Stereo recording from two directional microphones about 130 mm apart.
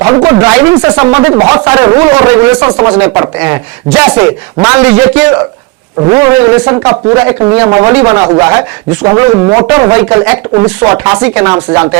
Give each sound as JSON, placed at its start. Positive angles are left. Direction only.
{"t": 0.0, "sound": "speech", "side_deg": -20}
{"t": 3.3, "sound": "speech", "side_deg": -10}
{"t": 4.1, "sound": "speech", "side_deg": -30}
{"t": 4.6, "sound": "speech", "side_deg": -15}
{"t": 6.0, "sound": "speech", "side_deg": -30}
{"t": 10.8, "sound": "speech", "side_deg": -15}